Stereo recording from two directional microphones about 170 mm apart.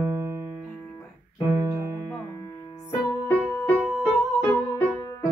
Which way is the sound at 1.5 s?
20° right (ahead or behind).